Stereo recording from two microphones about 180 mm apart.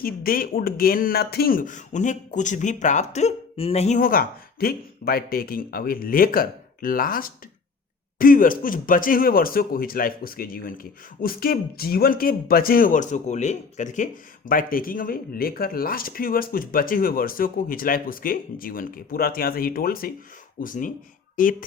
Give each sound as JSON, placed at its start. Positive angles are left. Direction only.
{"t": 0.0, "sound": "speech", "side_deg": 55}